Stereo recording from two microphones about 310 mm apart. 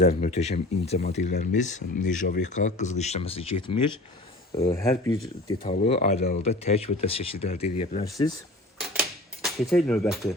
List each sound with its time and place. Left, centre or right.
0.0 s speech: left
4.5 s speech: centre
5.6 s speech: left
9.4 s speech: centre